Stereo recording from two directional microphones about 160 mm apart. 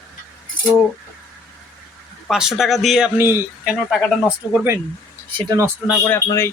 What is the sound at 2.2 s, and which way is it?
Speech, centre (ahead or behind).